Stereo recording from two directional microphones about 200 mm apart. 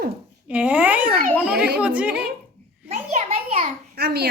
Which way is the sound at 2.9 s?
35° right (ahead or behind).